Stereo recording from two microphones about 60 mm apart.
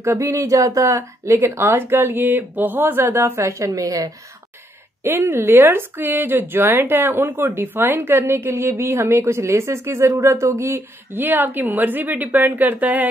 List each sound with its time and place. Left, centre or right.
0.0 s speech: right
3.3 s a woman's voice: right
5.0 s a woman's voice: right
7.6 s a woman's voice: right
7.9 s speech: right
11.1 s a woman's voice: right